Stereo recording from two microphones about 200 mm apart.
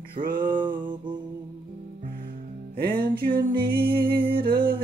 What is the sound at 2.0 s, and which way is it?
Music, 45° right (ahead or behind).